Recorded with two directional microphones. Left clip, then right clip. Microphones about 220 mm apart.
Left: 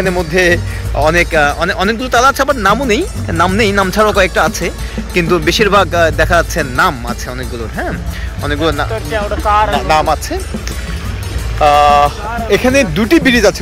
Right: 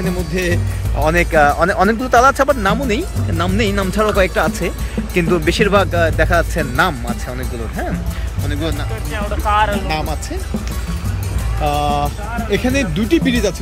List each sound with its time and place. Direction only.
0.0 s speech: 5° right (ahead or behind)
8.5 s speech: 5° right (ahead or behind)
9.1 s speech: 30° left (ahead or behind)
9.8 s speech: 5° right (ahead or behind)
11.6 s speech: centre (ahead or behind)